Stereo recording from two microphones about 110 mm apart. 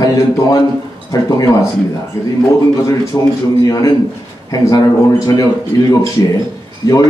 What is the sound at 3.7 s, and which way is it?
Speech, 35° left (ahead or behind).